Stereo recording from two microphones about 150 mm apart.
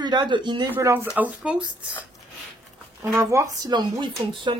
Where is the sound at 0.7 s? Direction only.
15° right (ahead or behind).